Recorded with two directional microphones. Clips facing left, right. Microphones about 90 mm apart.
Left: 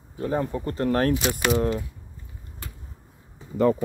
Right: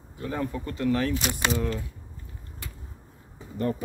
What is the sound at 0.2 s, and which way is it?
Speech, 30° left (ahead or behind).